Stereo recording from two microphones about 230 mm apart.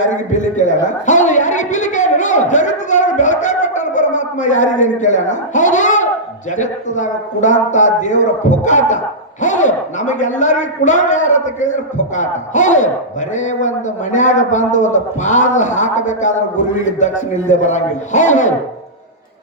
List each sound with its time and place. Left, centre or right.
0.0 s a man's voice: left